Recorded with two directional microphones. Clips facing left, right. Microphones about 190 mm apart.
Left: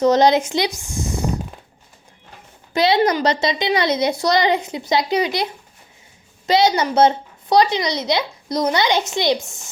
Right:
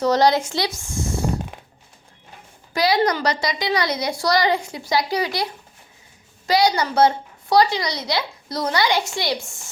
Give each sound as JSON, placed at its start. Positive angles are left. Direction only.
{"t": 0.0, "sound": "a woman's voice", "side_deg": 20}
{"t": 2.7, "sound": "a woman's voice", "side_deg": 25}